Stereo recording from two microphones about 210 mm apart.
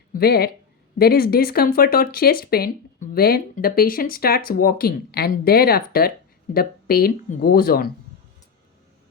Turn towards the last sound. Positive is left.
turn(degrees=45)  # may be behind; listen again after turning